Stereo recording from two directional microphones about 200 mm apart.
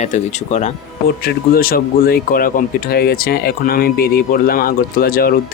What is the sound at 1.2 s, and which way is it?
Speech, 45° left (ahead or behind).